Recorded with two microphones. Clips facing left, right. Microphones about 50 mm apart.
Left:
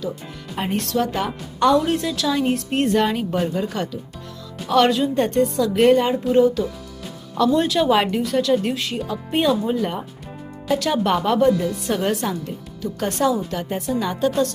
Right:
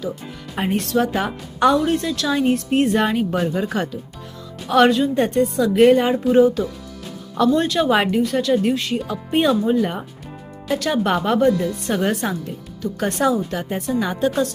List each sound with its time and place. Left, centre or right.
0.5 s a woman's voice: centre
0.9 s speech: centre
1.8 s a woman's voice: centre
4.7 s speech: centre
7.5 s a woman's voice: centre